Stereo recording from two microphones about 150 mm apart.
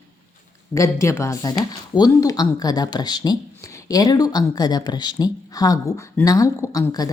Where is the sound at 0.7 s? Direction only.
20° left (ahead or behind).